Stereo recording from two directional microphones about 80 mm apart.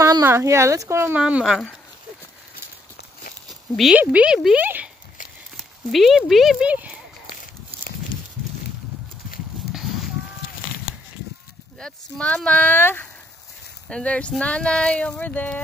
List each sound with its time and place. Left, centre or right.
0.2 s speech: right
1.1 s speech: centre
3.4 s a sound: centre
3.9 s speech: centre
5.9 s speech: centre
6.6 s speech: centre
11.8 s speech: centre
13.8 s speech: centre